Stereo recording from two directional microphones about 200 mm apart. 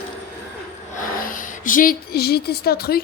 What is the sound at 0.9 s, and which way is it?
A woman's voice, 45° left (ahead or behind).